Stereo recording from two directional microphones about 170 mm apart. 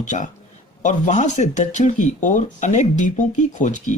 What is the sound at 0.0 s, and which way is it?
A man's voice, 45° left (ahead or behind).